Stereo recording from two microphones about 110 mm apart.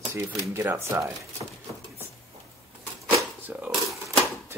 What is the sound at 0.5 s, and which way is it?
Speech, 25° right (ahead or behind).